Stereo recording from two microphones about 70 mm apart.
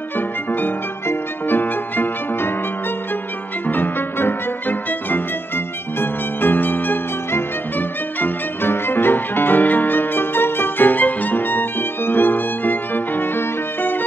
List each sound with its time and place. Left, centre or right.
0.5 s music: left
3.6 s music: left